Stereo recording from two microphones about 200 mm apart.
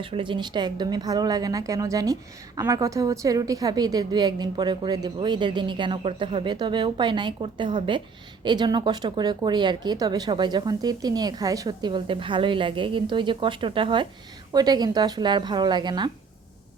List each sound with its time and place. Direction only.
0.0 s speech: 25° right (ahead or behind)